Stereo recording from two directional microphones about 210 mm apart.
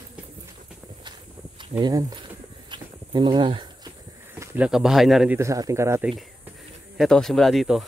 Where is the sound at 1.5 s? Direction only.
20° right (ahead or behind).